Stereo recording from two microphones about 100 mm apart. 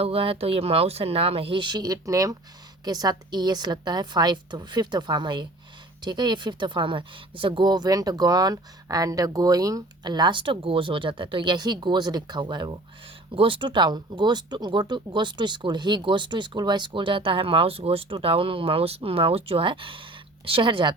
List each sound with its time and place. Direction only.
0.0 s speech: 70° right (ahead or behind); by 12.7 s 50° right (ahead or behind)
13.3 s speech: 60° right (ahead or behind)